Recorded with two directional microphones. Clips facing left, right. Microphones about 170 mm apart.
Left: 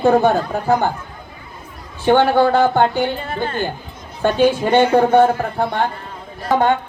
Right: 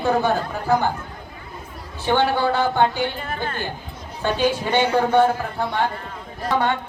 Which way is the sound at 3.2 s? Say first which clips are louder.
Left 4 dB; 30° left (ahead or behind).